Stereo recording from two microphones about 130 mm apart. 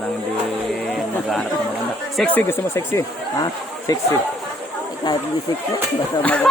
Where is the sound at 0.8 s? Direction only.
5° left (ahead or behind); by 3.9 s 30° left (ahead or behind).